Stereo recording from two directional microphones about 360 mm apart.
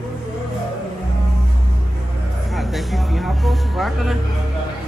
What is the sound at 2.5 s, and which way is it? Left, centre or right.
Speech, centre.